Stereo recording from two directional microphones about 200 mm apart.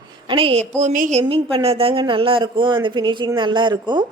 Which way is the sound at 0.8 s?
40° right (ahead or behind).